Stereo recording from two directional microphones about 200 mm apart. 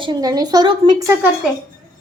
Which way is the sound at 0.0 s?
20° right (ahead or behind).